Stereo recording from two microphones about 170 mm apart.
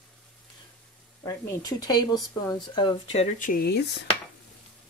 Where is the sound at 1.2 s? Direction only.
20° left (ahead or behind).